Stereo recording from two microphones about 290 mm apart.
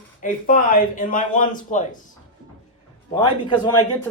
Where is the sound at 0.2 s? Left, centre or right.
Left.